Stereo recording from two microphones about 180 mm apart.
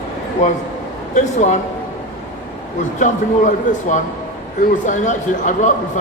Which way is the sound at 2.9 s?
45° left (ahead or behind).